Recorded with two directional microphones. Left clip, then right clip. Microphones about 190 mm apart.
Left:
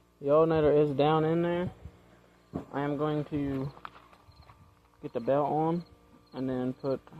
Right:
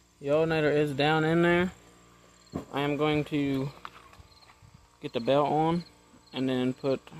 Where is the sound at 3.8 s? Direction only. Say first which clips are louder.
Right 1 dB; 60° left (ahead or behind).